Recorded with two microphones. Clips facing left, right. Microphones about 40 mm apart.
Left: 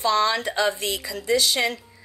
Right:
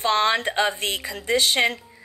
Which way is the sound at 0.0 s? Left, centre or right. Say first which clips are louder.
Right 1 dB; right.